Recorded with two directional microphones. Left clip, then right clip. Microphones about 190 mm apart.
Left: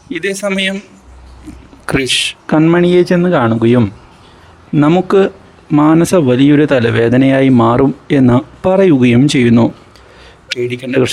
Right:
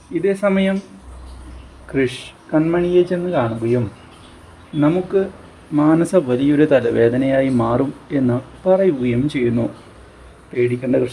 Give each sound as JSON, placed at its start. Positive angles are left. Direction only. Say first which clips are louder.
{"t": 0.1, "sound": "speech", "louder": "left 1 dB", "side_deg": 50}
{"t": 1.9, "sound": "speech", "louder": "left 8 dB", "side_deg": 50}
{"t": 3.3, "sound": "speech", "louder": "left 6 dB", "side_deg": 45}
{"t": 4.8, "sound": "speech", "louder": "left 7 dB", "side_deg": 45}
{"t": 10.7, "sound": "speech", "louder": "left 7 dB", "side_deg": 40}